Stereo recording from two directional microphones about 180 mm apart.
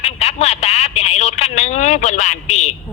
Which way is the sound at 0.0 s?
35° left (ahead or behind).